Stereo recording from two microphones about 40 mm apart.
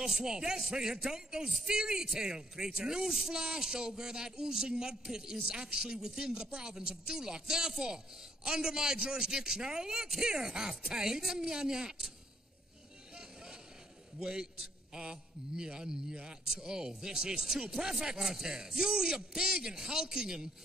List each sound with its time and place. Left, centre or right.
0.0 s a man's voice: centre
13.1 s vehicle: centre
14.2 s a man's voice: centre